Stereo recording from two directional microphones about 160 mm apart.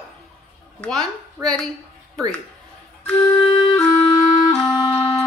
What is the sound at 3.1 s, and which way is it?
Music, 10° left (ahead or behind).